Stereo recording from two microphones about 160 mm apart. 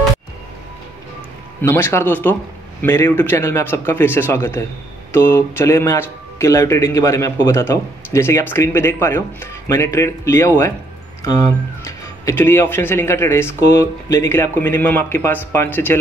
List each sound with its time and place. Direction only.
1.6 s speech: 15° left (ahead or behind)